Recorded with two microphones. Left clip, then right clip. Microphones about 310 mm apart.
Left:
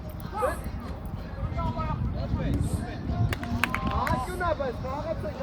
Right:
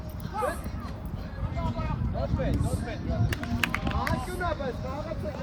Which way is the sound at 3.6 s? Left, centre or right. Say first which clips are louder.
Left 1 dB; centre.